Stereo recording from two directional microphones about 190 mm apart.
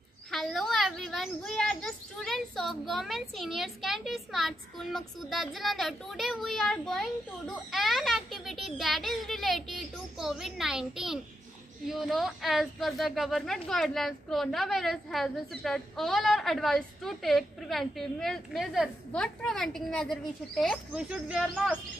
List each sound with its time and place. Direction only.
0.3 s speech: centre (ahead or behind)